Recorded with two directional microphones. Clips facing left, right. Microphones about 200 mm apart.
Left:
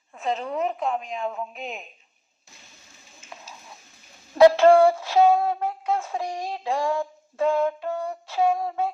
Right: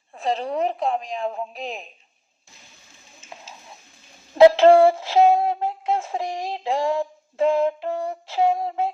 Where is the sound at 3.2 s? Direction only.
25° right (ahead or behind).